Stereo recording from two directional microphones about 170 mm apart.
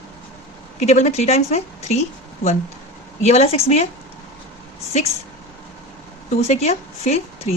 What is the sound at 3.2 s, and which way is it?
Speech, 40° left (ahead or behind).